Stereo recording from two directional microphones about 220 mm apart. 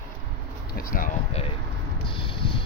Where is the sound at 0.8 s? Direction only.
40° left (ahead or behind).